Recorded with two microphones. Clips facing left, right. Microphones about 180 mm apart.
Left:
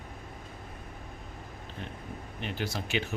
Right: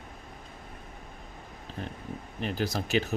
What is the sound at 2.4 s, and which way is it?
Speech, 40° right (ahead or behind).